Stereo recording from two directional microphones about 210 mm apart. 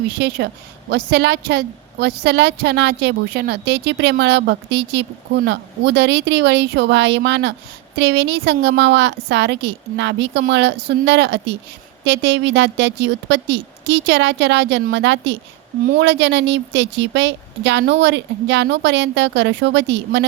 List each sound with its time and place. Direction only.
0.1 s a woman's voice: 50° right (ahead or behind)